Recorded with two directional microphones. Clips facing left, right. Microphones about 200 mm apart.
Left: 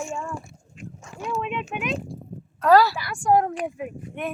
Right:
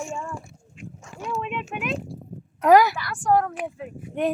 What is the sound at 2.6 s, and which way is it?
Speech, 20° right (ahead or behind).